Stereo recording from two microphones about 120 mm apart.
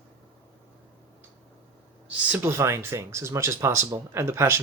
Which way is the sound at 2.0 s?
15° right (ahead or behind).